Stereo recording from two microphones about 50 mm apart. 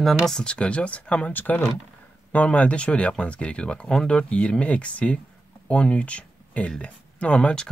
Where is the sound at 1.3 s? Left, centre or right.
Left.